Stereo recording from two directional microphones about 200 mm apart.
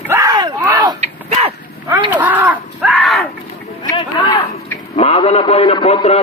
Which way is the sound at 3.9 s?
25° left (ahead or behind).